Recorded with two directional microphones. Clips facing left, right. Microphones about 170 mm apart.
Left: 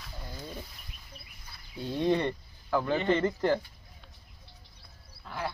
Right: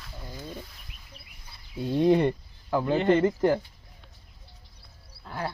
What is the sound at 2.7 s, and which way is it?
Speech, 25° right (ahead or behind).